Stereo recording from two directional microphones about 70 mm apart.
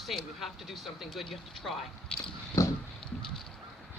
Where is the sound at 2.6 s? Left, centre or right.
Left.